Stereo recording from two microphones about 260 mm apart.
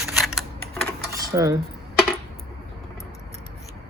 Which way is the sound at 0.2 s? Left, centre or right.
Centre.